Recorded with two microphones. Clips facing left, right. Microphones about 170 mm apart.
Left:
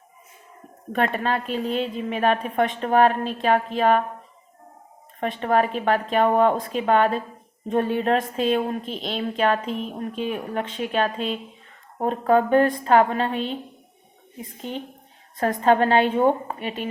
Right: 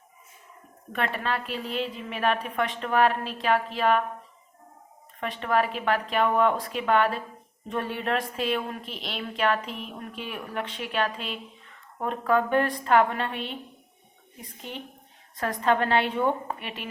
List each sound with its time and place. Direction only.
0.9 s a woman's voice: 40° left (ahead or behind)
5.2 s a woman's voice: 40° left (ahead or behind)
15.4 s a woman's voice: 45° left (ahead or behind)